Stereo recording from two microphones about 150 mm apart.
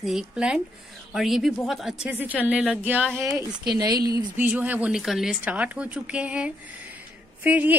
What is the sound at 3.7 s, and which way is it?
Speech, 25° right (ahead or behind).